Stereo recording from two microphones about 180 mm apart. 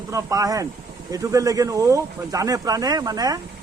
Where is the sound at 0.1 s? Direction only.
15° right (ahead or behind).